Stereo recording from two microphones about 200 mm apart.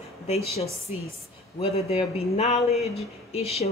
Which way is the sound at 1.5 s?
30° left (ahead or behind).